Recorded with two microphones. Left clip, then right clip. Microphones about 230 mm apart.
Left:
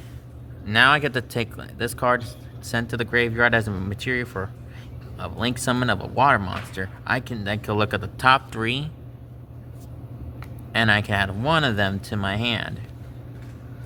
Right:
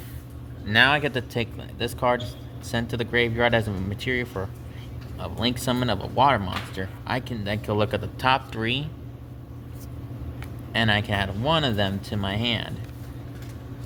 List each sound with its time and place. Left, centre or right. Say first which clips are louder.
0.6 s speech: left 2 dB; centre
10.7 s speech: left 3 dB; left